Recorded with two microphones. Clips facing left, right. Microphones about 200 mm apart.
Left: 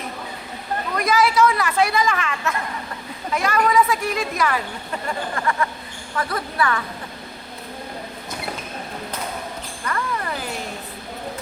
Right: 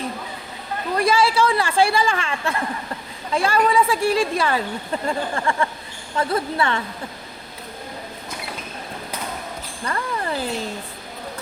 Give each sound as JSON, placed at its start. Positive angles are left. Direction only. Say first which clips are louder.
{"t": 0.9, "sound": "a woman's voice", "louder": "even", "side_deg": -30}
{"t": 9.8, "sound": "music", "louder": "right 1 dB", "side_deg": -30}